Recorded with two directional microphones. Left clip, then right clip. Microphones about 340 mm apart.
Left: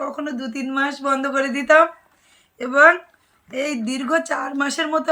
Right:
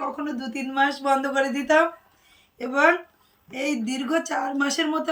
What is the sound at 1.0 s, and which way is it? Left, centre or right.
Speech, centre.